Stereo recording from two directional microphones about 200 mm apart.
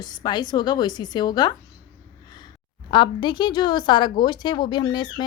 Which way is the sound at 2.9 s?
25° left (ahead or behind).